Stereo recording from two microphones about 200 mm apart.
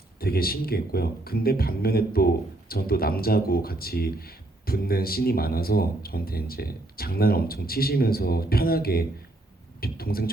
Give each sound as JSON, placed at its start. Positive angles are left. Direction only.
{"t": 0.2, "sound": "speech", "side_deg": 50}